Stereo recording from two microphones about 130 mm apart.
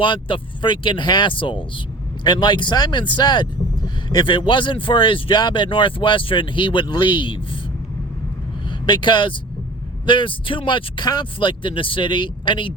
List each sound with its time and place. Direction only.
0.0 s speech: 40° left (ahead or behind)
8.9 s speech: 35° left (ahead or behind)